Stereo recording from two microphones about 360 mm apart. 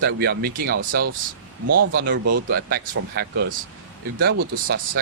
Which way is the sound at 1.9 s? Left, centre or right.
Right.